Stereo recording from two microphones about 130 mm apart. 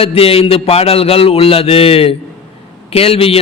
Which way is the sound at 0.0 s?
45° left (ahead or behind).